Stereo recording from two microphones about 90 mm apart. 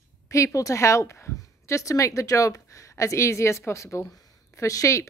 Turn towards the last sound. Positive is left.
turn(degrees=35)  # may be behind; listen again after turning